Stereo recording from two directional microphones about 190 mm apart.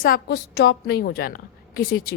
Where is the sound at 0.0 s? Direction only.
55° left (ahead or behind).